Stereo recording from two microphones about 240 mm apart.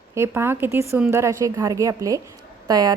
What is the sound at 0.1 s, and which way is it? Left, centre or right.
A woman's voice, centre.